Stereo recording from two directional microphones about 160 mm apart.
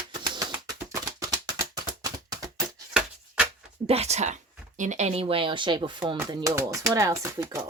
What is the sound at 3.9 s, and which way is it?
A woman's voice, 40° right (ahead or behind).